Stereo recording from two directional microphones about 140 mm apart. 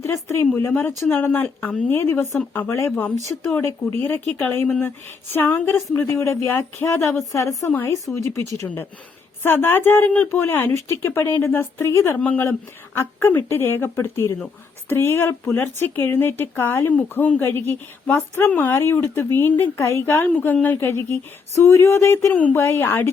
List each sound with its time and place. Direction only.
0.0 s a woman's voice: 20° left (ahead or behind)